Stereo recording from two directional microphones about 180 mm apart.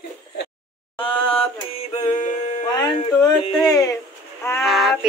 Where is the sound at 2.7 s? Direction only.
20° left (ahead or behind).